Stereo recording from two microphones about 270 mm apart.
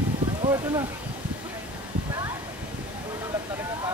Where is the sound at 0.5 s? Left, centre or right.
Centre.